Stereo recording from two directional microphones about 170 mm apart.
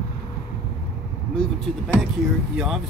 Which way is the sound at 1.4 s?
10° left (ahead or behind).